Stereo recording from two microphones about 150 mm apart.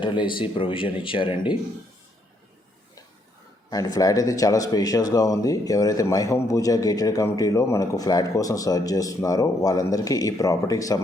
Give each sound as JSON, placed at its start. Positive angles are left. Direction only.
{"t": 0.0, "sound": "speech", "side_deg": 30}
{"t": 3.7, "sound": "speech", "side_deg": 25}